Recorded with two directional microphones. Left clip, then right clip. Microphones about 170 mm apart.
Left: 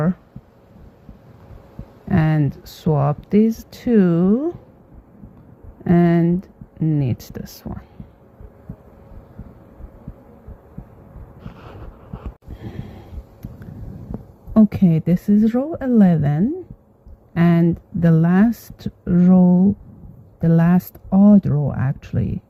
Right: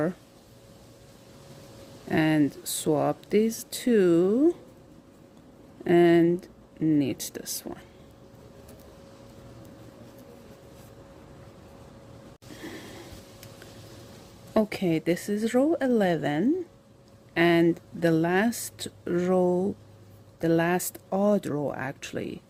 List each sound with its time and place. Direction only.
2.0 s speech: 30° right (ahead or behind)
5.8 s speech: 30° right (ahead or behind)
14.5 s speech: 25° right (ahead or behind)